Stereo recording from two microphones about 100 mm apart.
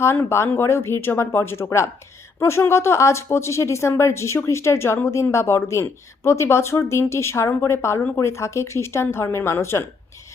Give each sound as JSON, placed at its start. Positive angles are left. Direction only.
{"t": 0.0, "sound": "speech", "side_deg": 25}